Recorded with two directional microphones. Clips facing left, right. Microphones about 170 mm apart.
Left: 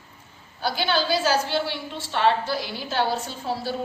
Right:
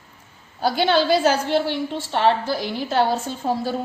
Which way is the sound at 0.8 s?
25° right (ahead or behind).